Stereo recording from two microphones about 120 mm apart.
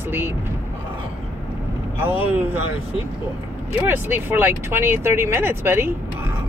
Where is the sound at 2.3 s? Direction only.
15° right (ahead or behind).